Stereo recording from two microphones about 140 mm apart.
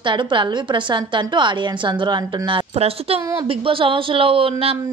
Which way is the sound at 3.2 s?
25° right (ahead or behind).